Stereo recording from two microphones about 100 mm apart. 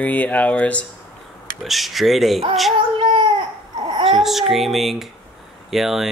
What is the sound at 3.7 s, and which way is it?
Babbling, 50° right (ahead or behind).